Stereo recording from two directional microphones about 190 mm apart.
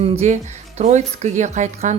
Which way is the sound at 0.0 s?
35° right (ahead or behind).